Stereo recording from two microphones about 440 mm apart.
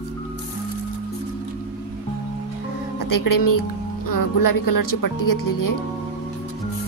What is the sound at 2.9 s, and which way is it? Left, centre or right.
A woman's voice, left.